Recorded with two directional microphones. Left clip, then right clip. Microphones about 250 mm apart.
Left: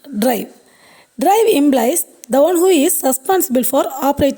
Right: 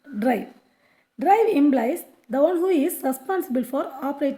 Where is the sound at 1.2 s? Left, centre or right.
Left.